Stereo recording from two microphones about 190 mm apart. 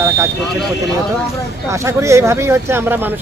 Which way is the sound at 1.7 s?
15° right (ahead or behind).